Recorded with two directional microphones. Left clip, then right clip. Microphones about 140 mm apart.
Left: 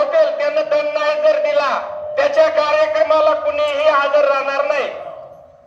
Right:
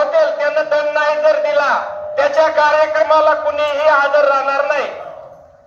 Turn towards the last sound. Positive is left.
turn(degrees=30)  # may be behind; listen again after turning